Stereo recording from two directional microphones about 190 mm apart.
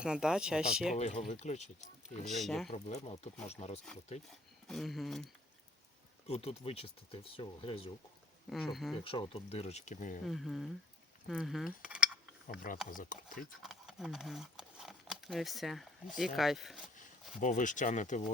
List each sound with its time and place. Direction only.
0.0 s speech: 5° right (ahead or behind)
0.9 s speech: 35° left (ahead or behind)
2.2 s speech: centre (ahead or behind)
2.7 s speech: 35° left (ahead or behind)
4.7 s speech: centre (ahead or behind)
6.2 s speech: 35° left (ahead or behind)
8.4 s speech: centre (ahead or behind)
9.0 s speech: 25° left (ahead or behind)
10.2 s speech: centre (ahead or behind)
12.5 s speech: 45° left (ahead or behind)
13.4 s speech: centre (ahead or behind)
17.4 s speech: 40° left (ahead or behind)